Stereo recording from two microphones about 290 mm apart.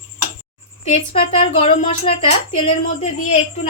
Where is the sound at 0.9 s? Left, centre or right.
Left.